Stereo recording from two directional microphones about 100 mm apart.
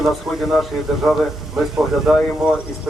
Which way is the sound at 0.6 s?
Centre (ahead or behind).